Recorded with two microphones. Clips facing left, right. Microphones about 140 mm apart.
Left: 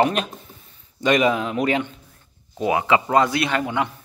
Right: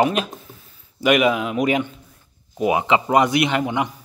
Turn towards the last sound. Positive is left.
turn(degrees=-20)  # may be behind; listen again after turning